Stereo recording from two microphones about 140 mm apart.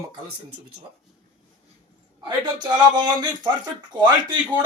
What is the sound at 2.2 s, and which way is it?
Speech, 30° right (ahead or behind).